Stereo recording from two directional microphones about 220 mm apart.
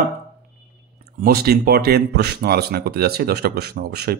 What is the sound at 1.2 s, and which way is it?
Speech, 45° right (ahead or behind).